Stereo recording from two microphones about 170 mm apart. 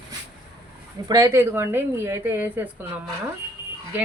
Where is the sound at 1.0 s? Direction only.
20° right (ahead or behind).